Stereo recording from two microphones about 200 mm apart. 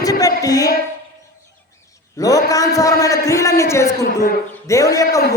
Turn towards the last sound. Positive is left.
turn(degrees=15)  # may be behind; listen again after turning